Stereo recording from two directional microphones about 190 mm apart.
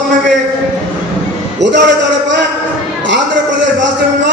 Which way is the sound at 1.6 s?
70° right (ahead or behind).